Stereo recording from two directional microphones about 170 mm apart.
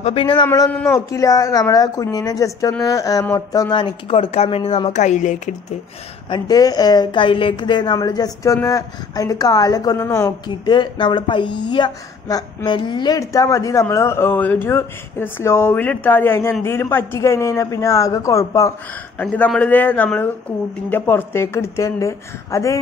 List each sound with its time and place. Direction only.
0.0 s speech: 35° left (ahead or behind)
0.5 s a woman's voice: 10° left (ahead or behind); by 5.4 s 45° left (ahead or behind)
6.3 s a woman's voice: 20° left (ahead or behind)